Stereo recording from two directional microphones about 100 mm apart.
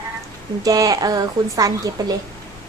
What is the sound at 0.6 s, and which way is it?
Speech, 35° right (ahead or behind).